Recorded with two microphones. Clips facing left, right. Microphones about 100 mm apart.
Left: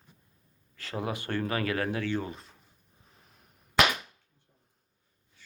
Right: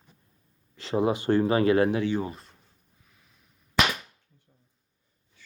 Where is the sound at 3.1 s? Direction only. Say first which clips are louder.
Left 4 dB; 40° left (ahead or behind).